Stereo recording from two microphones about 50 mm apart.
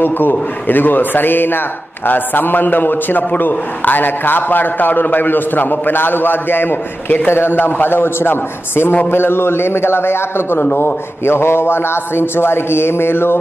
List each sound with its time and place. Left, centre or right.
0.0 s a man's voice: left